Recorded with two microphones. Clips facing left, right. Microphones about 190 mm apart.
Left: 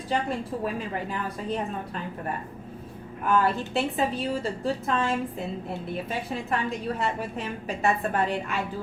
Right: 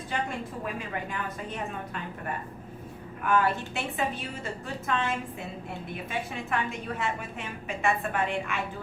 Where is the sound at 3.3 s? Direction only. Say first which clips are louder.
Left 2 dB; 35° left (ahead or behind).